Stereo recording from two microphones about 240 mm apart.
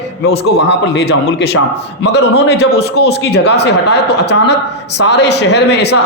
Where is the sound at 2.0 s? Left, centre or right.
Left.